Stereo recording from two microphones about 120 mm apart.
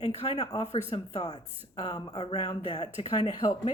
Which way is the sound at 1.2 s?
35° left (ahead or behind).